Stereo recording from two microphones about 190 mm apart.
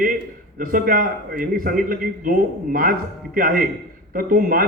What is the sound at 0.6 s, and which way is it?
Speech, 45° right (ahead or behind).